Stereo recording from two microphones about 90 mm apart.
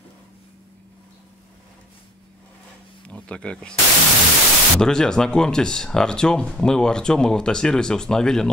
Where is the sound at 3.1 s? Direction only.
10° left (ahead or behind).